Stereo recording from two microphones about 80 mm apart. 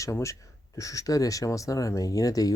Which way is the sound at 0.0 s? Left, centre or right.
Left.